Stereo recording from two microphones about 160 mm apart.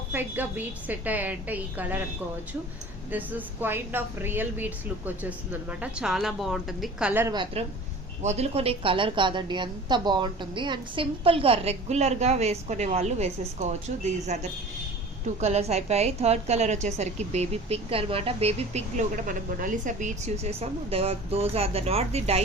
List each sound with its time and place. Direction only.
0.1 s a woman's voice: 10° right (ahead or behind)
3.1 s a woman's voice: 10° right (ahead or behind)
7.1 s a woman's voice: 15° right (ahead or behind)
8.2 s a woman's voice: 45° right (ahead or behind)
15.4 s a woman's voice: 40° right (ahead or behind)